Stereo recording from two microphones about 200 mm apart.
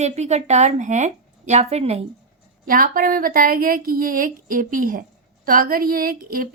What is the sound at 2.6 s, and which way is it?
A woman's voice, 45° right (ahead or behind).